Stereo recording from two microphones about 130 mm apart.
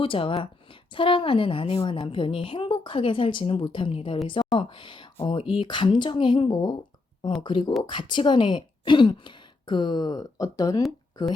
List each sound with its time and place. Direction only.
0.0 s a woman's voice: 45° left (ahead or behind)